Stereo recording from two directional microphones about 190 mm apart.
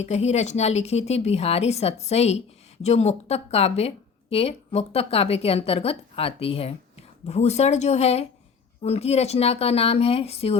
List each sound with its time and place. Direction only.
0.0 s speech: 35° left (ahead or behind)